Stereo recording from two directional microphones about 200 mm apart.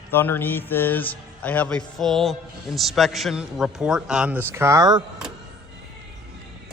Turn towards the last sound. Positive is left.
turn(degrees=-15)  # may be behind; listen again after turning